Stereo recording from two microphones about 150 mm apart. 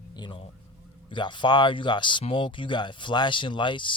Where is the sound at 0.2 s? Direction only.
35° left (ahead or behind).